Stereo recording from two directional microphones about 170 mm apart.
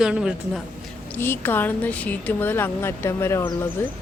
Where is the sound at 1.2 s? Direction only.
15° left (ahead or behind).